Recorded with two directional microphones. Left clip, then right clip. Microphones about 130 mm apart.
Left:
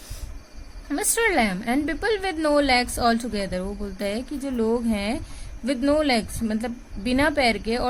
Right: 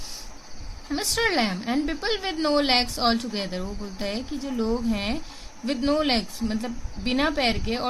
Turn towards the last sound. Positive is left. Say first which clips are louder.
# left 3 dB
turn(degrees=35)  # may be behind; listen again after turning